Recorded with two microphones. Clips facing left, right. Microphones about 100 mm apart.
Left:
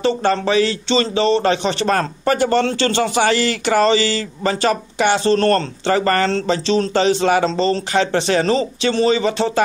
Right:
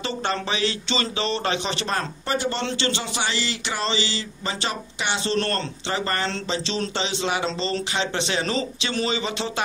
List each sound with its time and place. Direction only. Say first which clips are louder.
0.0 s speech: left 10 dB; 40° left (ahead or behind)